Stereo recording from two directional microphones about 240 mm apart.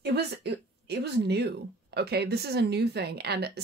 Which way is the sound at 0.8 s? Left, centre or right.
Right.